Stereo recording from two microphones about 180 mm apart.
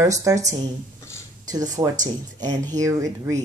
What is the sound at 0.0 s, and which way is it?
A woman's voice, 15° right (ahead or behind).